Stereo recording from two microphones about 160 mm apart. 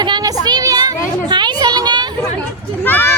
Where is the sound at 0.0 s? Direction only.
25° right (ahead or behind).